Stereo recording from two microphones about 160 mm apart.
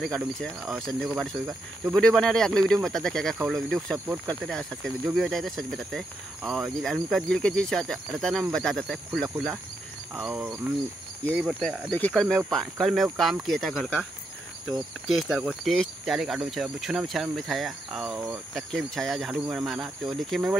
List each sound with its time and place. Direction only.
0.0 s speech: centre (ahead or behind)
15.0 s speech: centre (ahead or behind)